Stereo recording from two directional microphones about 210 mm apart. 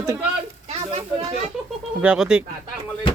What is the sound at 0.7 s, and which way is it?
Speech, 30° right (ahead or behind).